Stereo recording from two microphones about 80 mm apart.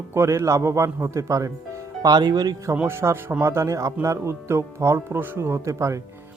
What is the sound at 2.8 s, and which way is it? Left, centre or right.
A man's voice, right.